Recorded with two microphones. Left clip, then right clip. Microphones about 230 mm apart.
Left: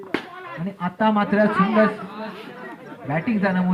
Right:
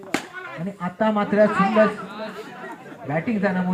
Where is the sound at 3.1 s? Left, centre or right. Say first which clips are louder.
Left 1 dB; left.